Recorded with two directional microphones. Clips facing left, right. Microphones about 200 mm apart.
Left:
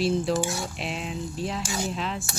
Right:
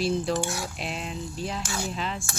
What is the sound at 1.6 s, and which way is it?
Cutlery, 15° left (ahead or behind).